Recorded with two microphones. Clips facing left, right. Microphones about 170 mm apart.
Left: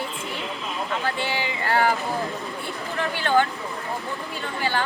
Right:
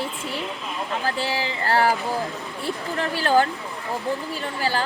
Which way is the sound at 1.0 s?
35° right (ahead or behind).